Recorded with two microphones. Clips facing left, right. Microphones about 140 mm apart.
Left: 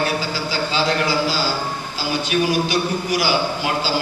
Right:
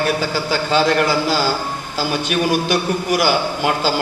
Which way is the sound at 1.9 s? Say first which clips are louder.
Right 2 dB; 55° right (ahead or behind).